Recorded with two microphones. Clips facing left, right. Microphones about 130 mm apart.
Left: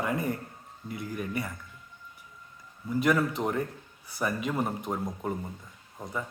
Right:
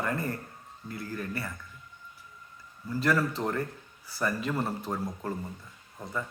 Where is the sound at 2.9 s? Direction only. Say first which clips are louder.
Left 2 dB; 20° left (ahead or behind).